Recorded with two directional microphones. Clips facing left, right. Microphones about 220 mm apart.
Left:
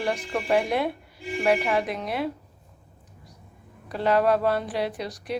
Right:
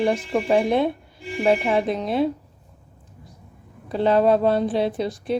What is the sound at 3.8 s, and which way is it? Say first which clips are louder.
Speech: right 4 dB; 25° right (ahead or behind).